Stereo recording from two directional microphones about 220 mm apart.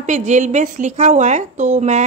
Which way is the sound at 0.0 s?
35° right (ahead or behind).